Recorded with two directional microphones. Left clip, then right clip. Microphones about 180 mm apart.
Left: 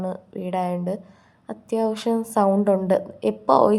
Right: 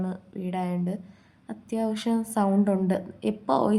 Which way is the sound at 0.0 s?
20° left (ahead or behind).